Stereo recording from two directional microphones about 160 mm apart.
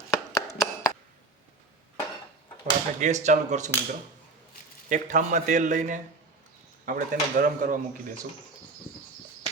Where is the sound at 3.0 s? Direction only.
45° right (ahead or behind).